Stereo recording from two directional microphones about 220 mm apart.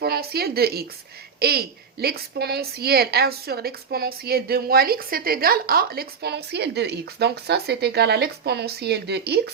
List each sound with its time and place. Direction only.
0.0 s a woman's voice: 45° right (ahead or behind)